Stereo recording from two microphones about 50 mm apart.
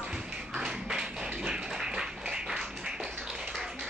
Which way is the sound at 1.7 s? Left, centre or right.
Centre.